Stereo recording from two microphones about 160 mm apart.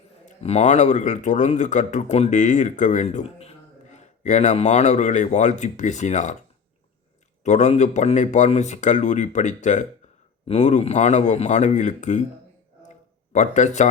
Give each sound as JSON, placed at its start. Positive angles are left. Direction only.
{"t": 0.3, "sound": "speech", "side_deg": 45}
{"t": 7.4, "sound": "speech", "side_deg": 45}
{"t": 13.3, "sound": "speech", "side_deg": 50}